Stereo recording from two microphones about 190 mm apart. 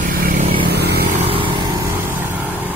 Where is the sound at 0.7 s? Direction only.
60° right (ahead or behind).